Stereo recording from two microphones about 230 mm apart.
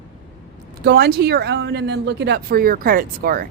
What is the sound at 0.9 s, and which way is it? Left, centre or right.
Speech, right.